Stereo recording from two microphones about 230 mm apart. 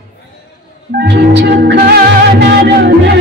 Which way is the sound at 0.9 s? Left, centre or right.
Right.